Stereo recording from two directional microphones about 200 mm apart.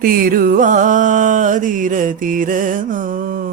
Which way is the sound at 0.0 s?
45° right (ahead or behind).